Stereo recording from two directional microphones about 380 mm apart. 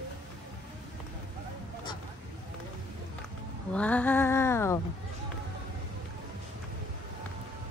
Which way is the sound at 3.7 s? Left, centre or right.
Centre.